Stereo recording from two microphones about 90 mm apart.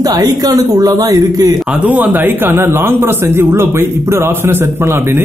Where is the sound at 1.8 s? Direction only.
20° right (ahead or behind).